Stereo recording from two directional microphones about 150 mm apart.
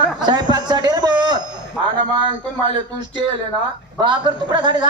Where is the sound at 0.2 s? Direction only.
30° right (ahead or behind).